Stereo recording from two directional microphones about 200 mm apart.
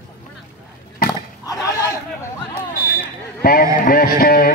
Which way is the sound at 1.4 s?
15° left (ahead or behind).